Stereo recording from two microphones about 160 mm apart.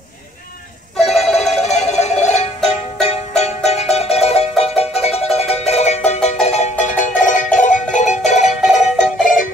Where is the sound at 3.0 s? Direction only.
45° left (ahead or behind).